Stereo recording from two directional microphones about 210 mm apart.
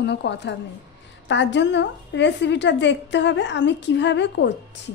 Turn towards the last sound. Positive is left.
turn(degrees=55)  # may be behind; listen again after turning